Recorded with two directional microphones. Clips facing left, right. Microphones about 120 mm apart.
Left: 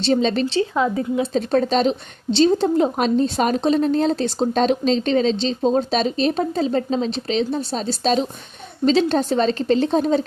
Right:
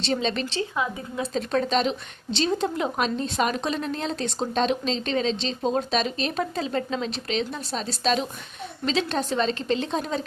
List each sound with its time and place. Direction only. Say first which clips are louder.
0.0 s speech: left 7 dB; 40° left (ahead or behind)